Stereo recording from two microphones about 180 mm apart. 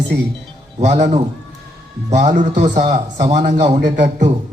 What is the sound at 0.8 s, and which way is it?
A man's voice, 40° right (ahead or behind).